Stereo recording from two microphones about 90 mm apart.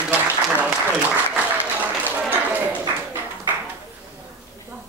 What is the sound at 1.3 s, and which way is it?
Applause, 20° right (ahead or behind).